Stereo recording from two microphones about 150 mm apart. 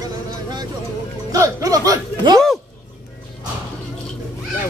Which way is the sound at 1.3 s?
25° right (ahead or behind).